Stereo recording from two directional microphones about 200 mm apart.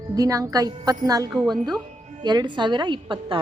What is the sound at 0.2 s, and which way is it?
A woman's voice, 15° right (ahead or behind).